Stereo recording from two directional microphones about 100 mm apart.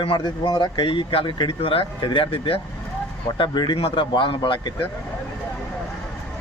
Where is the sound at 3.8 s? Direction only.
60° left (ahead or behind).